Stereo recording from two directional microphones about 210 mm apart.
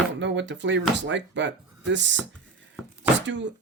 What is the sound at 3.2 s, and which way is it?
Speech, 60° right (ahead or behind).